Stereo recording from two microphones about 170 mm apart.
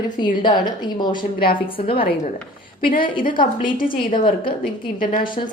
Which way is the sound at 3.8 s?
50° left (ahead or behind).